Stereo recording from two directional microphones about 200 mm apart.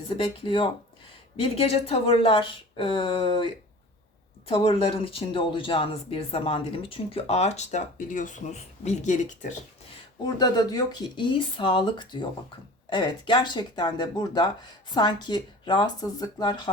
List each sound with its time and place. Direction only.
0.1 s speech: 25° left (ahead or behind)
10.2 s speech: 20° left (ahead or behind)